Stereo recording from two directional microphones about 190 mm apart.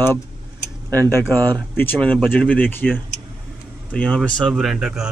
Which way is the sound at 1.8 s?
10° left (ahead or behind).